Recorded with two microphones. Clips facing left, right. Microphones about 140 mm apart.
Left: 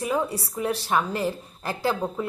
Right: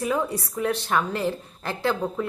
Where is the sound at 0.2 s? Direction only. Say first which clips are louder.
Even; 30° left (ahead or behind).